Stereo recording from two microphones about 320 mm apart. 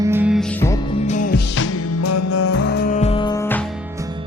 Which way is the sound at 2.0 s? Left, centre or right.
Left.